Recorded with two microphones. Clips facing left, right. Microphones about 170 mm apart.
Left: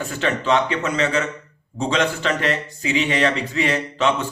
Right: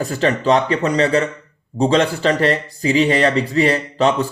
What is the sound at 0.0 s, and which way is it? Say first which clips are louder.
Speech: right 5 dB; 35° right (ahead or behind).